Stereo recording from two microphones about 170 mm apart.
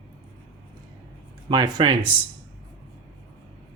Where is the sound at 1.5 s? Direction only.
25° right (ahead or behind).